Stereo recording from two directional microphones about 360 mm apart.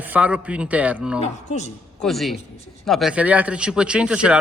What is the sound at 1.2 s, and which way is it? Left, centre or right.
Speech, centre.